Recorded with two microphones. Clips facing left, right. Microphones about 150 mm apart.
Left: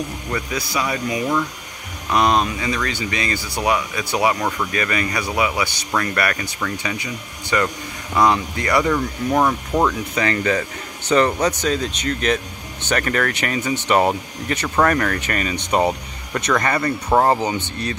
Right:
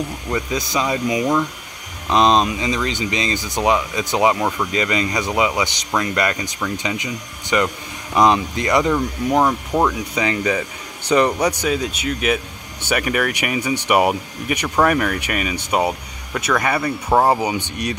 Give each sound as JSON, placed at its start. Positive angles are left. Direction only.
{"t": 0.3, "sound": "speech", "side_deg": -20}